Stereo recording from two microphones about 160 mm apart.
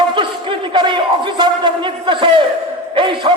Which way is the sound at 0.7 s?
30° right (ahead or behind).